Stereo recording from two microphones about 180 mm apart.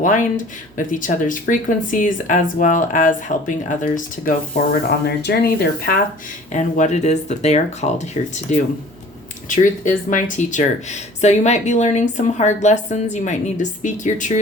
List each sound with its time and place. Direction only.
0.0 s speech: 45° left (ahead or behind)
6.5 s speech: 40° left (ahead or behind)